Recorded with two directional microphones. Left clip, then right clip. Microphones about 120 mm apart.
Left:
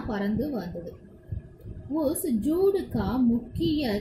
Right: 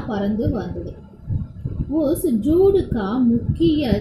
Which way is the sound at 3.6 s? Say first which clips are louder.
Right 10 dB; 40° left (ahead or behind).